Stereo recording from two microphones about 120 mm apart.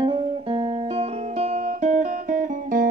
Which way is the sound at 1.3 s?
90° right.